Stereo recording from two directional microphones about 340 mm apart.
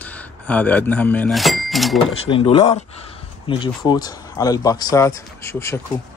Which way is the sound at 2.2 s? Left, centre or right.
Centre.